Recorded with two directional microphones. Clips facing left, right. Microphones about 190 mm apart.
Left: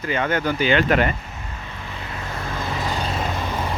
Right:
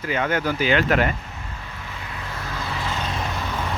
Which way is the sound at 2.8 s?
35° left (ahead or behind).